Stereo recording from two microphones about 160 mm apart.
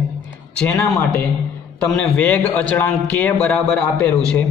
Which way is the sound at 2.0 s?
10° left (ahead or behind).